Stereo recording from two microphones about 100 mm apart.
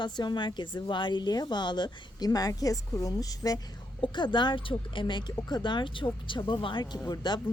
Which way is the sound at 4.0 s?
50° left (ahead or behind).